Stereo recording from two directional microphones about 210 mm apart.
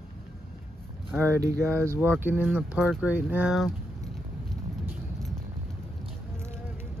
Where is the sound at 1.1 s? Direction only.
10° right (ahead or behind).